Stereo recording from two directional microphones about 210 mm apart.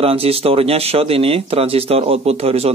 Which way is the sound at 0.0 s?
25° right (ahead or behind).